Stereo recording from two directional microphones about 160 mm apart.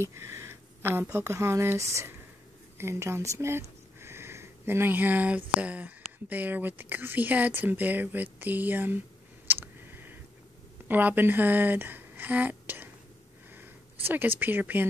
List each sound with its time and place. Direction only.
0.0 s speech: 15° right (ahead or behind)
9.5 s clicking: 15° right (ahead or behind)
10.9 s speech: 10° right (ahead or behind)